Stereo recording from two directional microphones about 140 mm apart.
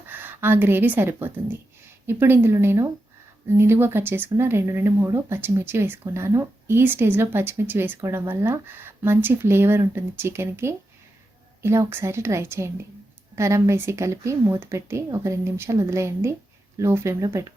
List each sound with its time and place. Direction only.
0.1 s a woman's voice: 15° right (ahead or behind)